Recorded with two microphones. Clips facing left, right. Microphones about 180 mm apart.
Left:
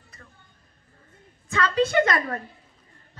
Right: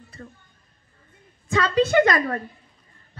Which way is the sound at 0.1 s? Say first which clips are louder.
Right 11 dB; 30° right (ahead or behind).